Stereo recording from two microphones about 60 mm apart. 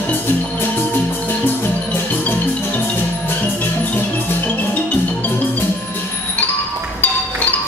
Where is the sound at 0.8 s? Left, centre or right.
Left.